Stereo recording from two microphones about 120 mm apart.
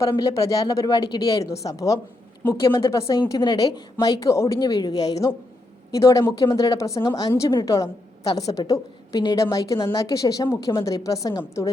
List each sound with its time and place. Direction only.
0.0 s a woman's voice: 25° left (ahead or behind)
3.2 s a woman's voice: 35° left (ahead or behind)